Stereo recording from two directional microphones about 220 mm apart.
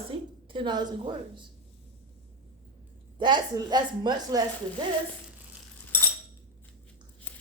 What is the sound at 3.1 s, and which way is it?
A woman's voice, 20° right (ahead or behind).